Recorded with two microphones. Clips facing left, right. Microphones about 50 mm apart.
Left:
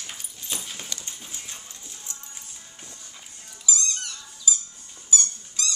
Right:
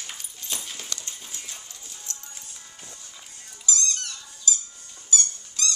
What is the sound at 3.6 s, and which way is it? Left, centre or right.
Dog, centre.